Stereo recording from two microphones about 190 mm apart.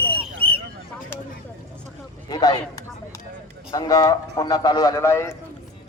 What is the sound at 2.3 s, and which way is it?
Speech, 20° left (ahead or behind).